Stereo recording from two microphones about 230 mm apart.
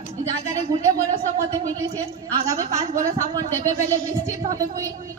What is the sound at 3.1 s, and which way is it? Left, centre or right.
A woman's voice, centre.